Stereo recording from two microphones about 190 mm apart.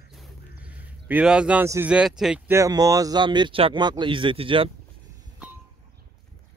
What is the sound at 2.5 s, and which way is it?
Speech, 15° right (ahead or behind).